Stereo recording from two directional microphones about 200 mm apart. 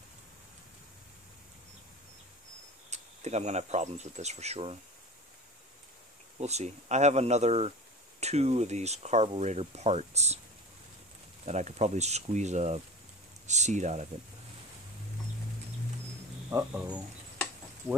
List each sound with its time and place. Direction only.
2.9 s speech: 35° right (ahead or behind)
6.3 s speech: 35° right (ahead or behind)
11.4 s speech: 35° right (ahead or behind)
16.4 s speech: 15° right (ahead or behind)